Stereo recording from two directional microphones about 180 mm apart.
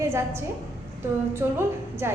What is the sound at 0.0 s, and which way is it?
A woman's voice, 15° right (ahead or behind).